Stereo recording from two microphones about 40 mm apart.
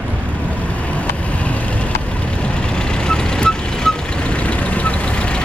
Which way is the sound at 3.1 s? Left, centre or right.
Centre.